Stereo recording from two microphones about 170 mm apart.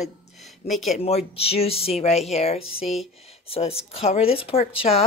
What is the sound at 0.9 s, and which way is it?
Speech, 35° left (ahead or behind).